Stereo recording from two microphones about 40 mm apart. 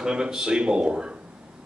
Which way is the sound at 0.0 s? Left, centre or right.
Centre.